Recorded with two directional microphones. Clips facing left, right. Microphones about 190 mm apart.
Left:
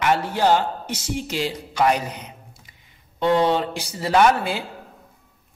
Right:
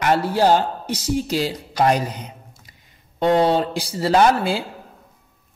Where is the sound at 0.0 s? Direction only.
35° right (ahead or behind).